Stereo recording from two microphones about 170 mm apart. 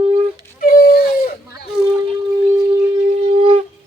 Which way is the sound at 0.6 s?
60° left (ahead or behind).